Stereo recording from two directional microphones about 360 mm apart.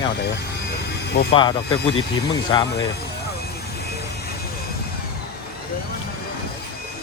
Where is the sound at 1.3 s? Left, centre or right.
Centre.